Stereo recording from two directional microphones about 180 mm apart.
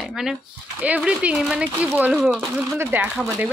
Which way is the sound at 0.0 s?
5° right (ahead or behind).